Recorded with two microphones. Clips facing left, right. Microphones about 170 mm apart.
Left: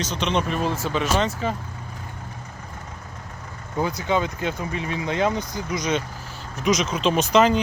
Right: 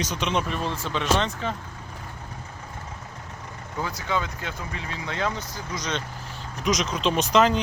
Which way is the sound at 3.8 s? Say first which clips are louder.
Left 5 dB; 20° left (ahead or behind).